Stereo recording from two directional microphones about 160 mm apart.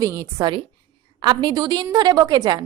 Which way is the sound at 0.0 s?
20° right (ahead or behind).